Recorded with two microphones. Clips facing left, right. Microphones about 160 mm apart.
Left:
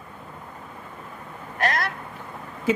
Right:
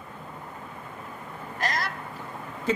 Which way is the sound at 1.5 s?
60° left (ahead or behind).